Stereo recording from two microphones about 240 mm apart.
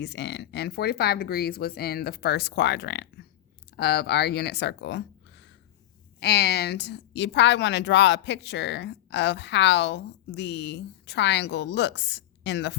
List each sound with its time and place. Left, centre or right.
0.0 s a woman's voice: left